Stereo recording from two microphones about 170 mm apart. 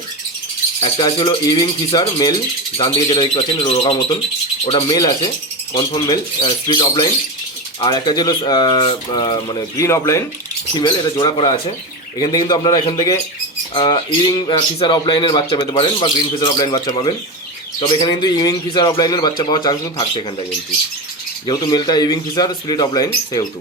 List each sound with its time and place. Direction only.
0.8 s speech: 30° left (ahead or behind)
21.4 s speech: 25° left (ahead or behind)